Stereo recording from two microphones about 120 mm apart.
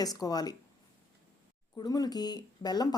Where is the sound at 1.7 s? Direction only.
30° left (ahead or behind).